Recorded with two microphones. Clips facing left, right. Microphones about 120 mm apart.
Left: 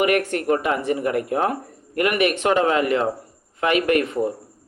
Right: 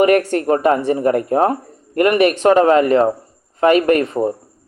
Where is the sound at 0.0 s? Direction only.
35° right (ahead or behind).